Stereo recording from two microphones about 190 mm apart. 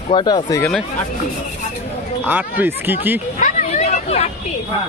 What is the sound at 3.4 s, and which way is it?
Hubbub, 40° left (ahead or behind).